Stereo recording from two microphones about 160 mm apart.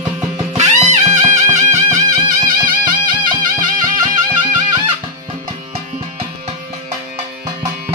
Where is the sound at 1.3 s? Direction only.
20° right (ahead or behind).